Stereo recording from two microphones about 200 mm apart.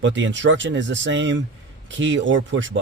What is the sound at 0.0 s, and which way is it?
Speech, 65° right (ahead or behind).